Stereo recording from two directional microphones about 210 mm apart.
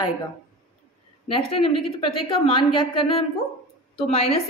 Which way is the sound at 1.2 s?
25° left (ahead or behind).